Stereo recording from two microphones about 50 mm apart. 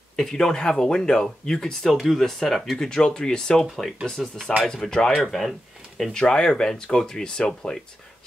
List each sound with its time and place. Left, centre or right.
0.2 s speech: centre
2.9 s speech: centre
3.7 s speech: centre
6.1 s speech: centre